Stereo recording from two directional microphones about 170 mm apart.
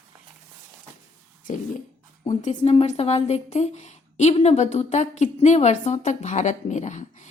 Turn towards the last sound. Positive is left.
turn(degrees=45)  # may be behind; listen again after turning